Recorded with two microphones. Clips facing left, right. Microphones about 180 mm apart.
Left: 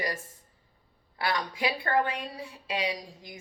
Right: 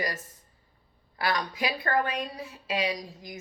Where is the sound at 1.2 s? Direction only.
25° left (ahead or behind).